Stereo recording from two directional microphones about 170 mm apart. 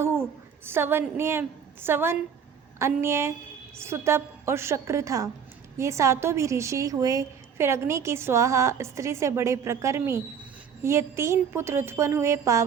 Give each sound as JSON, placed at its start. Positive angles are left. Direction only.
{"t": 0.0, "sound": "a woman's voice", "side_deg": -15}